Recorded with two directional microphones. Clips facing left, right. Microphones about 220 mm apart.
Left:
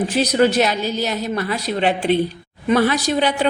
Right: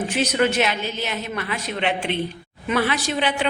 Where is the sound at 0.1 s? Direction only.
35° left (ahead or behind).